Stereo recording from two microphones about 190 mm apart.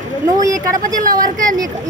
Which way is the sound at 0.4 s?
20° right (ahead or behind).